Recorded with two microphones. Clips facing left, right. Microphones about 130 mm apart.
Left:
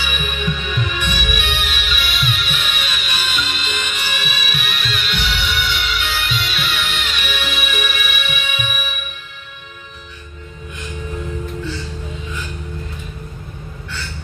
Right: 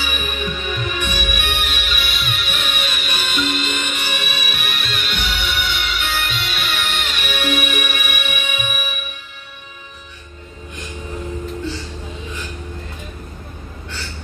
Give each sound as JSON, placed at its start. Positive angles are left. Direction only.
{"t": 0.0, "sound": "music", "side_deg": -40}